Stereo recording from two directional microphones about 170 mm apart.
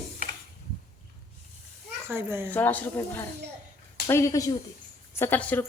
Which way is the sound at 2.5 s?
10° left (ahead or behind).